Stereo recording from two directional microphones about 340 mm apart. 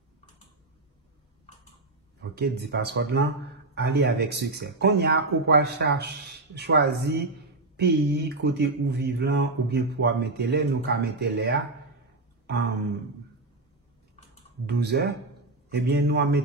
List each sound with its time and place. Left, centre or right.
2.3 s speech: right
12.4 s a sound: right
14.7 s speech: right